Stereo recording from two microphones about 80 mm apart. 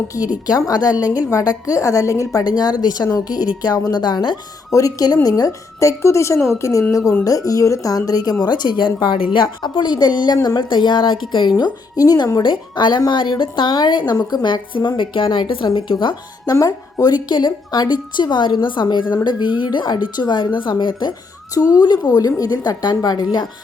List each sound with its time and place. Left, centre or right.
0.7 s a woman's voice: left
2.4 s a woman's voice: left
4.7 s a woman's voice: left
8.8 s a woman's voice: left
11.5 s a woman's voice: left
16.5 s a woman's voice: left
17.2 s a woman's voice: left
19.1 s a woman's voice: left
21.5 s a woman's voice: left